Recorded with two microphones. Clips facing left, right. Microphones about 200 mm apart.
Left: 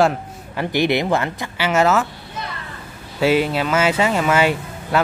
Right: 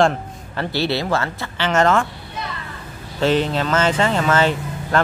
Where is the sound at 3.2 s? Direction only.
10° left (ahead or behind).